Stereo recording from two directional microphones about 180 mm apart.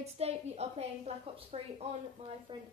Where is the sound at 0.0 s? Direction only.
35° right (ahead or behind).